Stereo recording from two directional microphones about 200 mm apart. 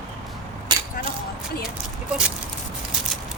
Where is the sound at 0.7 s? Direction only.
20° right (ahead or behind).